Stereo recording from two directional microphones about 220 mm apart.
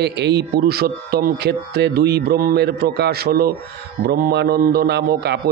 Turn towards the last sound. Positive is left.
turn(degrees=-45)  # may be behind; listen again after turning